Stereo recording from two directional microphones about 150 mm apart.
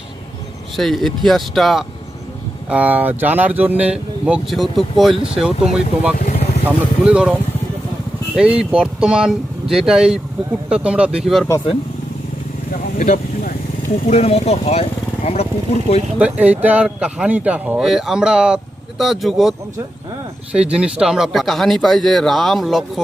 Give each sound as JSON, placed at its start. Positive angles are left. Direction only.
{"t": 0.8, "sound": "speech", "side_deg": 0}
{"t": 8.4, "sound": "speech", "side_deg": -5}
{"t": 12.7, "sound": "speech", "side_deg": 60}
{"t": 14.1, "sound": "speech", "side_deg": 45}
{"t": 16.1, "sound": "speech", "side_deg": -10}